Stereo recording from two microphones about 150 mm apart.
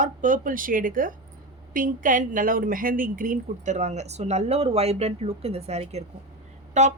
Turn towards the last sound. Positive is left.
turn(degrees=-50)  # may be behind; listen again after turning